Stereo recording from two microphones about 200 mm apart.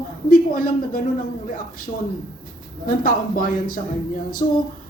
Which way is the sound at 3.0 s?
45° left (ahead or behind).